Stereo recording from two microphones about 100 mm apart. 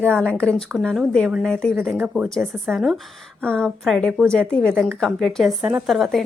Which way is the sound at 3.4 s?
10° left (ahead or behind).